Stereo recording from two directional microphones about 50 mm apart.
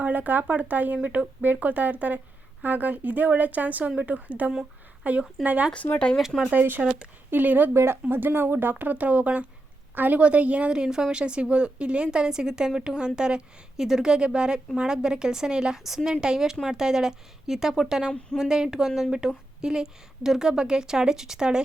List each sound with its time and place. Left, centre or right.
0.0 s a woman's voice: right
6.1 s speech: centre
6.5 s a woman's voice: right
7.7 s a woman's voice: right
10.2 s a woman's voice: right